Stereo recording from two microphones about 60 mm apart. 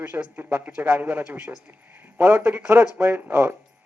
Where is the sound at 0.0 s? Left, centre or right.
Right.